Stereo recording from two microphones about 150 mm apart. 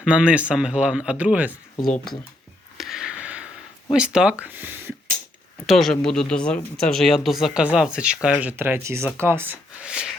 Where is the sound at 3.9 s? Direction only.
5° right (ahead or behind).